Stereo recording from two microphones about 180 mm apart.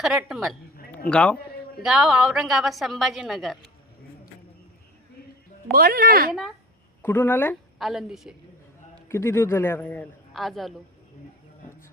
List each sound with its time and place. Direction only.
0.0 s a woman's voice: 5° right (ahead or behind)
1.8 s a woman's voice: 5° right (ahead or behind)
5.7 s speech: 55° right (ahead or behind)
7.0 s a man's voice: 10° left (ahead or behind)
7.8 s a woman's voice: centre (ahead or behind)
9.0 s a man's voice: 15° left (ahead or behind)